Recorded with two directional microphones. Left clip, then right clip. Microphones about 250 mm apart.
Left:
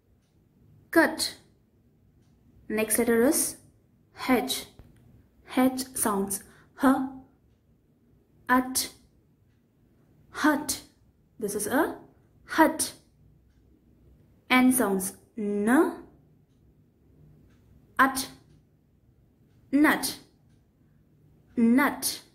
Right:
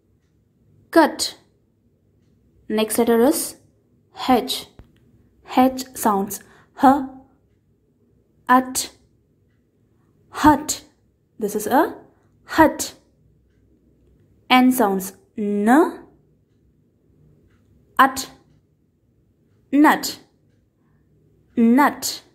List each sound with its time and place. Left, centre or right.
0.8 s a woman's voice: centre
2.7 s a woman's voice: centre
5.4 s a sound: centre
5.9 s a woman's voice: centre
8.5 s a woman's voice: centre
10.3 s a woman's voice: centre
14.5 s a woman's voice: centre
19.7 s a woman's voice: centre
21.5 s a woman's voice: centre